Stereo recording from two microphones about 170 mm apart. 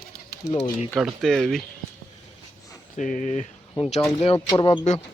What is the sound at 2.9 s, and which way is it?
Speech, 50° left (ahead or behind).